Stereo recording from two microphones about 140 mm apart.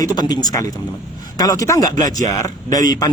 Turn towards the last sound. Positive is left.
turn(degrees=25)  # may be behind; listen again after turning